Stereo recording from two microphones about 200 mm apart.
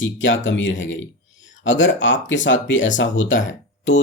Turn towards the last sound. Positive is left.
turn(degrees=70)  # may be behind; listen again after turning